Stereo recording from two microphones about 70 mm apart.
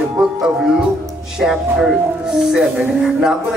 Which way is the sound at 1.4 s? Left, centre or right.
Centre.